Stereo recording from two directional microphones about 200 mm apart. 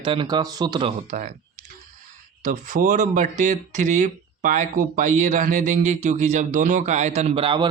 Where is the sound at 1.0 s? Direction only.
35° right (ahead or behind).